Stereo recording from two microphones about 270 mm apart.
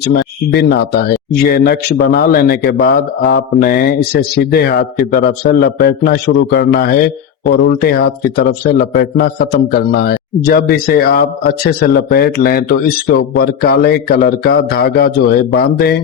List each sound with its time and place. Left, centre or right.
0.0 s a man's voice: left